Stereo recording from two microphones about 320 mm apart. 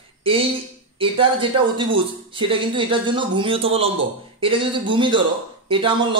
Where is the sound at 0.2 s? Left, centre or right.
Centre.